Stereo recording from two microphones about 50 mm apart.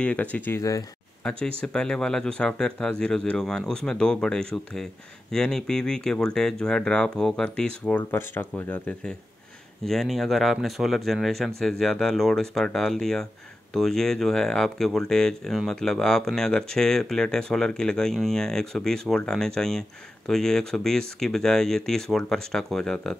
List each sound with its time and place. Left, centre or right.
0.0 s speech: left
1.2 s speech: centre
8.1 s speech: left
9.8 s speech: centre